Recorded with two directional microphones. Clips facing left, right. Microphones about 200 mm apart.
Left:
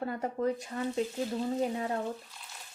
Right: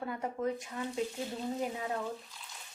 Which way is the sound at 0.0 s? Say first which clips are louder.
Left 3 dB; 45° left (ahead or behind).